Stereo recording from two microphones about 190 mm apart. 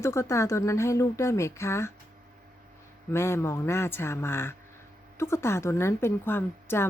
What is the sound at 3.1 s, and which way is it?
A woman's voice, 15° left (ahead or behind).